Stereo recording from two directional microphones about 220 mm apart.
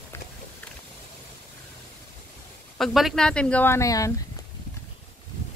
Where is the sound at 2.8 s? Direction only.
Centre (ahead or behind).